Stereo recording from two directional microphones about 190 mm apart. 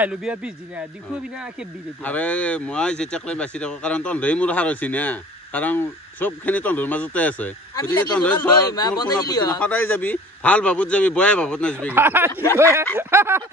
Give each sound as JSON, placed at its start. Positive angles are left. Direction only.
{"t": 0.0, "sound": "speech", "side_deg": -5}
{"t": 2.0, "sound": "speech", "side_deg": 5}
{"t": 8.5, "sound": "a man's voice", "side_deg": 20}
{"t": 11.9, "sound": "speech", "side_deg": -10}
{"t": 12.3, "sound": "speech", "side_deg": 15}
{"t": 12.5, "sound": "speech", "side_deg": -15}